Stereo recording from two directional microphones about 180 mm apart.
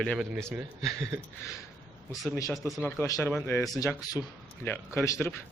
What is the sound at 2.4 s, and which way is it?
Speech, 20° left (ahead or behind).